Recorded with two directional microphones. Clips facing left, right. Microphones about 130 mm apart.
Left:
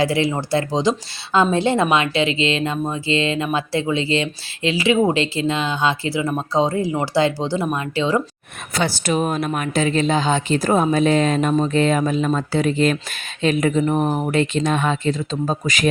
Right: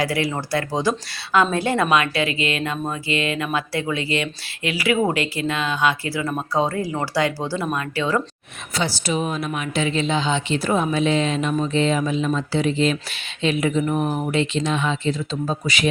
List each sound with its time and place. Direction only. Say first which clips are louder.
0.0 s speech: left 4 dB; 25° left (ahead or behind)
8.7 s a woman's voice: left 3 dB; 50° left (ahead or behind); by 14.3 s 35° left (ahead or behind)
14.3 s a woman's voice: left 3 dB; 50° left (ahead or behind)